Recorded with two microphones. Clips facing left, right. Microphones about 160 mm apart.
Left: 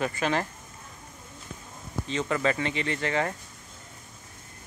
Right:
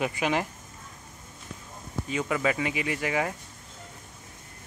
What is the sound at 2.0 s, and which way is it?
Speech, 10° right (ahead or behind).